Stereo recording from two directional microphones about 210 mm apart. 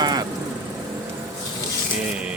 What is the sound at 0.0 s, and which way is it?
Vehicle, 20° right (ahead or behind).